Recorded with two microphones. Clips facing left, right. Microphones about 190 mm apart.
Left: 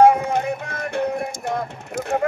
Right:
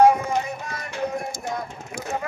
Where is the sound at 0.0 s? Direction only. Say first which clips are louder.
Left 2 dB; 55° left (ahead or behind).